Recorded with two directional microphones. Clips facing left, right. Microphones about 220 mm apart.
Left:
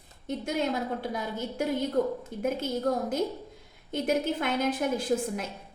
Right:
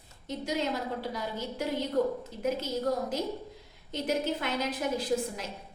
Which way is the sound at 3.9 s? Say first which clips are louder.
Left 3 dB; 50° left (ahead or behind).